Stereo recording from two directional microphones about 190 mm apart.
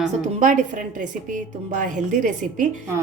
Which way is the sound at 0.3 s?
40° right (ahead or behind).